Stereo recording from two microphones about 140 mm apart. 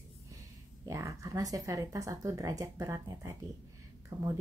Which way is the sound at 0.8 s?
20° right (ahead or behind).